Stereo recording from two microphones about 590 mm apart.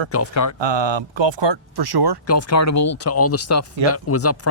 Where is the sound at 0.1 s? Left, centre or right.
Left.